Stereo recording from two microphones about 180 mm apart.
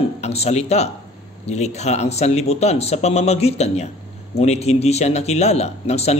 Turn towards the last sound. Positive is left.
turn(degrees=35)  # may be behind; listen again after turning